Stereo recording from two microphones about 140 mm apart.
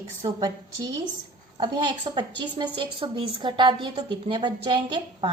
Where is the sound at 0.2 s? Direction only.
25° right (ahead or behind).